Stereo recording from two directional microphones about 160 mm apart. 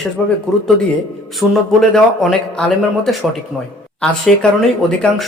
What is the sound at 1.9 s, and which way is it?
Speech, 5° left (ahead or behind).